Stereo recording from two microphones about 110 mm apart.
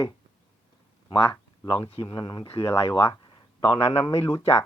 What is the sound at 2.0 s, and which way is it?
Speech, 40° left (ahead or behind).